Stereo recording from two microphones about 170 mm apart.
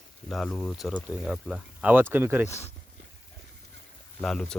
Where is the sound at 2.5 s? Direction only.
40° left (ahead or behind).